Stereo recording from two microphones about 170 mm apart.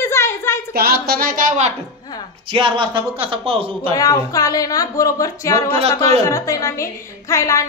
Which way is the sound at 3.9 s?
20° left (ahead or behind).